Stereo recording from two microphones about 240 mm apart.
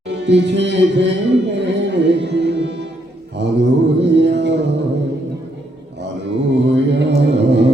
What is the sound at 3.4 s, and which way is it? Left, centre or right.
Mantra, right.